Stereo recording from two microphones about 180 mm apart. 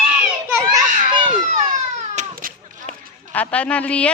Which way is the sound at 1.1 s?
25° right (ahead or behind).